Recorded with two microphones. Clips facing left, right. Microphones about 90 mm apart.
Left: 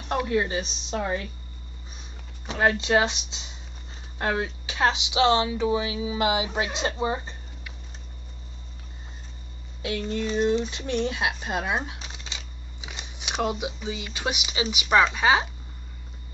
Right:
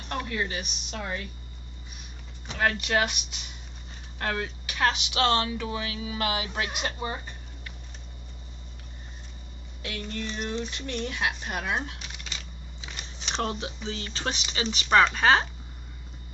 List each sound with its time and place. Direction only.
0.1 s speech: 20° left (ahead or behind)
2.5 s speech: 20° left (ahead or behind)
9.8 s speech: 20° left (ahead or behind)